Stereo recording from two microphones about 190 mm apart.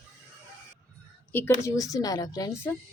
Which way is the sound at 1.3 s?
10° left (ahead or behind).